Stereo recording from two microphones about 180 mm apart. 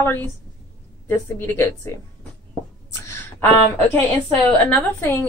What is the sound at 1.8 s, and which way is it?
Speech, 15° left (ahead or behind).